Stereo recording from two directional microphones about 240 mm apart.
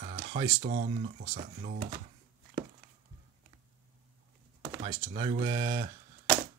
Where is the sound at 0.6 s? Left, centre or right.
Right.